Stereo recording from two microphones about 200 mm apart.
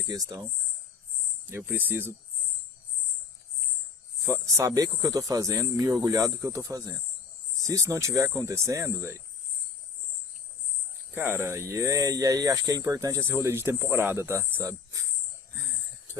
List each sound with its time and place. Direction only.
0.1 s speech: 20° right (ahead or behind)
1.5 s speech: 10° right (ahead or behind)
4.3 s speech: 15° right (ahead or behind)
11.1 s speech: 10° right (ahead or behind)